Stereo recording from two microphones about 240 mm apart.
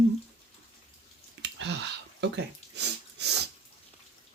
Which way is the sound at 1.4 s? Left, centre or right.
Right.